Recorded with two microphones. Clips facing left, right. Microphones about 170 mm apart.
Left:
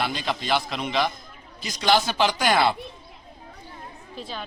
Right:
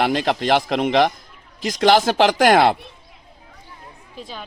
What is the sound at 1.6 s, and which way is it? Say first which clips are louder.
Speech: right 6 dB; 90° right.